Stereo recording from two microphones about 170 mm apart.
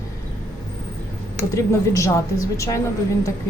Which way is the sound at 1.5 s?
15° left (ahead or behind).